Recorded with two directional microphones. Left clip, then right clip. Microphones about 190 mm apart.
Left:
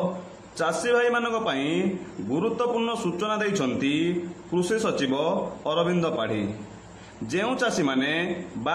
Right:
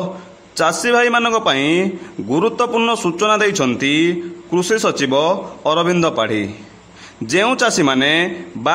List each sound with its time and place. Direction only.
0.6 s a man's voice: 35° right (ahead or behind)